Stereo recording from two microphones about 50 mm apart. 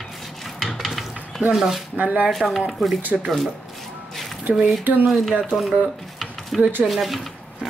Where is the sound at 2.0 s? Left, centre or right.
Right.